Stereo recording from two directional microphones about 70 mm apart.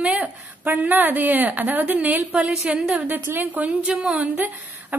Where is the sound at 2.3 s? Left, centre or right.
Centre.